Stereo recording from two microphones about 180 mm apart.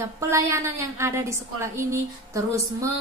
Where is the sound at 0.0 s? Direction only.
15° right (ahead or behind).